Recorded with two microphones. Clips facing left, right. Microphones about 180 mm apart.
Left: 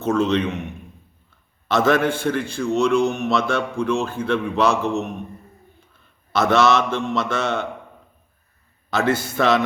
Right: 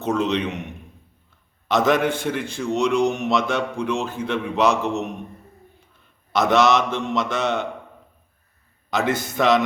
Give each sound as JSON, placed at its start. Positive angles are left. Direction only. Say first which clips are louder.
{"t": 0.0, "sound": "a man's voice", "louder": "left 3 dB", "side_deg": -20}
{"t": 1.6, "sound": "a man's voice", "louder": "left 1 dB", "side_deg": -20}
{"t": 6.3, "sound": "a man's voice", "louder": "even", "side_deg": -20}
{"t": 8.9, "sound": "a man's voice", "louder": "left 2 dB", "side_deg": -20}